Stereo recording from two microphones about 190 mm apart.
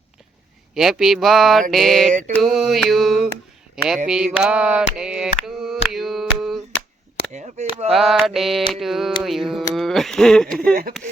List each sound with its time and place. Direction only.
0.7 s speech: centre (ahead or behind)
4.1 s a sound: 5° right (ahead or behind)
5.9 s mantra: centre (ahead or behind)
7.3 s chop: 35° right (ahead or behind)
7.9 s speech: centre (ahead or behind)